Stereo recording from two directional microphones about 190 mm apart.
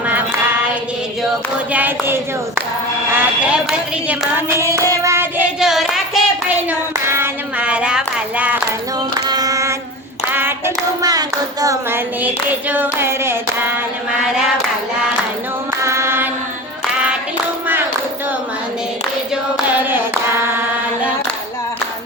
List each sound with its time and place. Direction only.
1.7 s speech: 10° right (ahead or behind)
3.2 s a sound: 5° right (ahead or behind)
4.9 s child singing: 15° right (ahead or behind)
9.2 s a sound: 20° right (ahead or behind)
11.0 s child singing: 20° right (ahead or behind)
15.8 s mantra: 15° right (ahead or behind)